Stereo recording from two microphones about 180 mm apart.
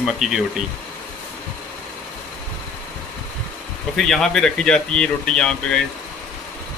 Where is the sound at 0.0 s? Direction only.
Centre (ahead or behind).